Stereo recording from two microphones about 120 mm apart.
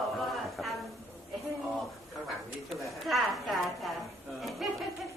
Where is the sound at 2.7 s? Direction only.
Centre (ahead or behind).